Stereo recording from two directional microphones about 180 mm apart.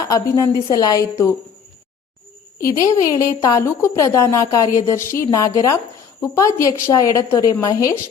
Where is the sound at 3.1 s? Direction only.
20° left (ahead or behind).